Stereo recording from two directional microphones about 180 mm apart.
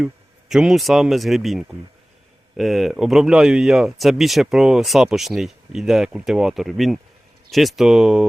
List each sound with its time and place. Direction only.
0.0 s speech: 5° right (ahead or behind)